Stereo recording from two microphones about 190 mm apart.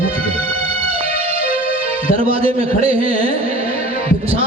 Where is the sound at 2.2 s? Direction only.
30° right (ahead or behind).